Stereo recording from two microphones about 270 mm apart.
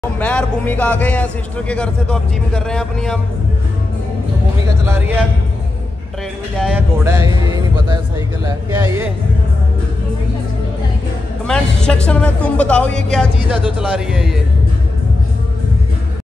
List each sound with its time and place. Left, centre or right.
0.2 s speech: centre
4.8 s speech: centre
6.6 s speech: centre
11.4 s speech: centre